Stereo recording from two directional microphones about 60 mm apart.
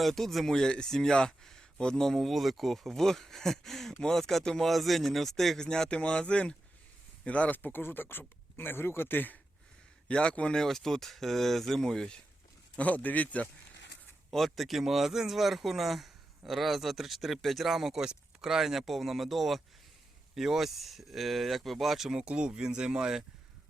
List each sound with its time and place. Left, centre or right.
0.0 s speech: centre; by 9.4 s left
10.1 s speech: centre
12.7 s a man's voice: left
14.3 s speech: centre